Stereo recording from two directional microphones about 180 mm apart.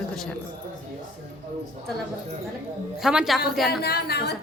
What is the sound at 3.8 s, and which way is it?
Speech, 60° left (ahead or behind).